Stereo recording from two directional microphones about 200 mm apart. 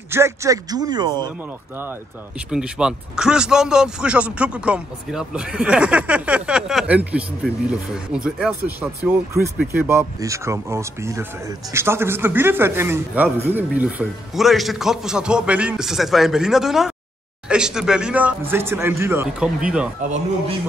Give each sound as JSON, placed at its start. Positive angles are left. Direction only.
{"t": 0.1, "sound": "speech", "side_deg": -15}
{"t": 1.8, "sound": "speech", "side_deg": -10}
{"t": 20.0, "sound": "speech", "side_deg": -35}